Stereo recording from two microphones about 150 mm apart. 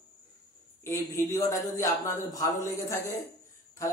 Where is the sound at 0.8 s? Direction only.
20° left (ahead or behind).